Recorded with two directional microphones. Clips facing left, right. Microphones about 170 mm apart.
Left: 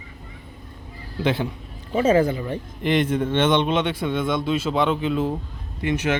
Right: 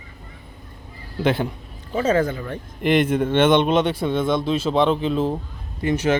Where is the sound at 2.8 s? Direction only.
50° right (ahead or behind).